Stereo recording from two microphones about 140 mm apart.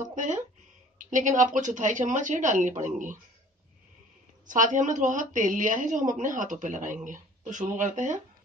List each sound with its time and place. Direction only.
0.0 s a sound: 65° right (ahead or behind)
0.9 s a woman's voice: 65° right (ahead or behind)
4.5 s a woman's voice: 65° right (ahead or behind)